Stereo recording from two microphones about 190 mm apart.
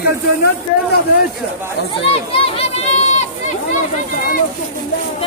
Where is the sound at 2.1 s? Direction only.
30° left (ahead or behind).